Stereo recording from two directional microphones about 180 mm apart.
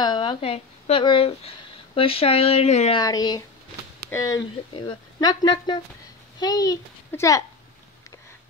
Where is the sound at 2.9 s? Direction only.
20° left (ahead or behind).